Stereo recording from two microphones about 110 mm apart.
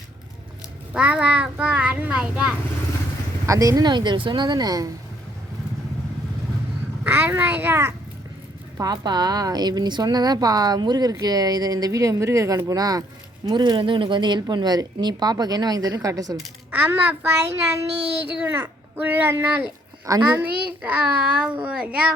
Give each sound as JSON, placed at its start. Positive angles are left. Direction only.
{"t": 0.9, "sound": "a child's voice", "side_deg": -10}
{"t": 3.4, "sound": "a woman's voice", "side_deg": -30}
{"t": 7.0, "sound": "a child's voice", "side_deg": -15}
{"t": 8.8, "sound": "a woman's voice", "side_deg": -40}
{"t": 16.7, "sound": "a child's voice", "side_deg": -15}
{"t": 20.1, "sound": "a woman's voice", "side_deg": -30}
{"t": 20.8, "sound": "a child's voice", "side_deg": -10}